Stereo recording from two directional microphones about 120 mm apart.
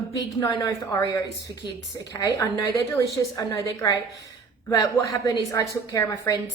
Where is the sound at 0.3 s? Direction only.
25° left (ahead or behind).